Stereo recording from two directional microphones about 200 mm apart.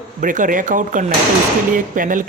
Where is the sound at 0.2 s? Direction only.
40° right (ahead or behind).